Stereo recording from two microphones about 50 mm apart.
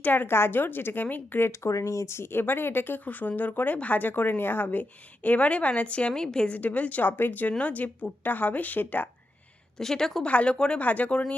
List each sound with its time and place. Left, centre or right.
0.0 s a woman's voice: left
1.4 s a woman's voice: left; by 6.5 s centre
6.5 s a woman's voice: left
9.7 s a woman's voice: centre
10.2 s a woman's voice: left